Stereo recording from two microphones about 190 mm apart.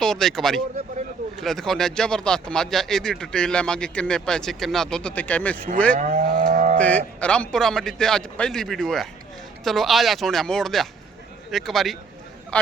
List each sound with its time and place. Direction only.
0.0 s speech: centre (ahead or behind)
5.7 s moo: 5° left (ahead or behind)
6.0 s livestock: 45° right (ahead or behind)
6.7 s speech: 5° left (ahead or behind)